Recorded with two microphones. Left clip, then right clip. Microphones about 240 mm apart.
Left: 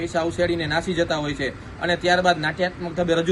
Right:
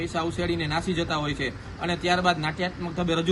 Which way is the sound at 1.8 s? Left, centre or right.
Right.